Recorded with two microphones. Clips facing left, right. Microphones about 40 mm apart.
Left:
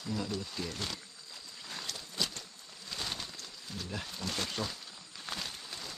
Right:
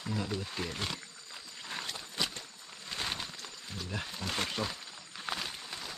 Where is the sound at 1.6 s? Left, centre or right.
Right.